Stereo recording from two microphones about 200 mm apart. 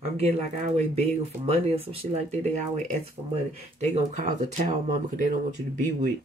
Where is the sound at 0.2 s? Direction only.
30° right (ahead or behind).